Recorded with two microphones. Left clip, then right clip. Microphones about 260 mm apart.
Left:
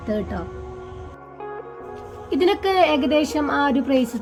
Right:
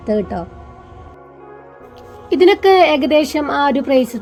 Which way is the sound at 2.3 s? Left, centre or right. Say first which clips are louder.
Right 9 dB; centre.